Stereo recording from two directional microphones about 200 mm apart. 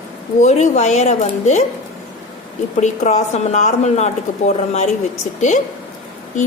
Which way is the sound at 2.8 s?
35° left (ahead or behind).